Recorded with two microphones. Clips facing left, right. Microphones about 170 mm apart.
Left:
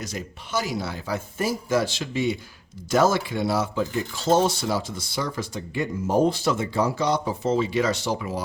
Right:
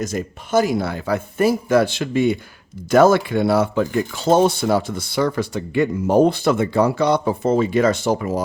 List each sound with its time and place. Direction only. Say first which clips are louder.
0.0 s speech: right 9 dB; 50° right (ahead or behind)